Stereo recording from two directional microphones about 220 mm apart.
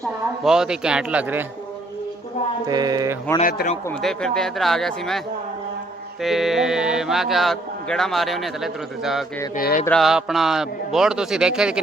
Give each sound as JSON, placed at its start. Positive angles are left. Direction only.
{"t": 0.4, "sound": "speech", "side_deg": -5}
{"t": 2.6, "sound": "mantra", "side_deg": -15}
{"t": 3.4, "sound": "speech", "side_deg": 40}
{"t": 4.0, "sound": "speech", "side_deg": 0}
{"t": 6.2, "sound": "speech", "side_deg": 0}
{"t": 9.6, "sound": "speech", "side_deg": 40}
{"t": 9.8, "sound": "speech", "side_deg": 0}